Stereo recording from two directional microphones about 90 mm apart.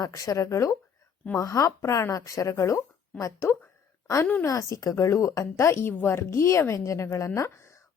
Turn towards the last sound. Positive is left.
turn(degrees=30)  # may be behind; listen again after turning